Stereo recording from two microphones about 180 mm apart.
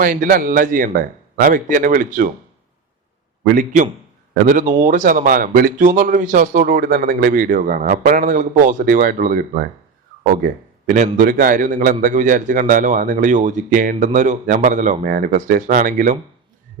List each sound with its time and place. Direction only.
0.0 s a man's voice: 50° right (ahead or behind)
3.4 s a man's voice: 50° right (ahead or behind)